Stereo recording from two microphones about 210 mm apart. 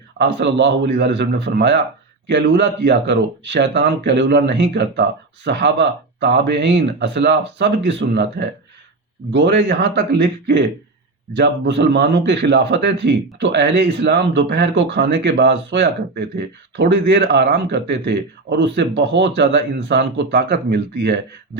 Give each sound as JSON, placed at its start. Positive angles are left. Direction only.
{"t": 0.2, "sound": "a man's voice", "side_deg": -55}